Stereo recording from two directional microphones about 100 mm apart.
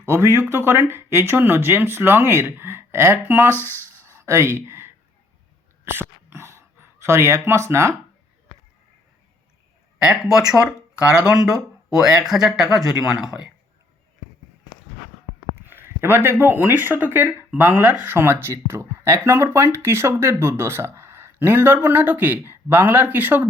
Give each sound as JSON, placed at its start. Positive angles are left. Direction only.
{"t": 0.0, "sound": "speech", "side_deg": -30}
{"t": 3.5, "sound": "speech", "side_deg": 20}
{"t": 4.0, "sound": "a sound", "side_deg": -30}
{"t": 10.5, "sound": "speech", "side_deg": -10}
{"t": 15.6, "sound": "speech", "side_deg": -20}